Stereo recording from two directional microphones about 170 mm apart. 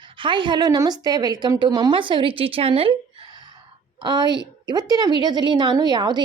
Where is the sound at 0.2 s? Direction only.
30° right (ahead or behind).